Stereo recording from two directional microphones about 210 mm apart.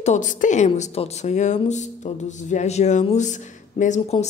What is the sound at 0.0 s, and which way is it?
A woman's voice, 35° left (ahead or behind).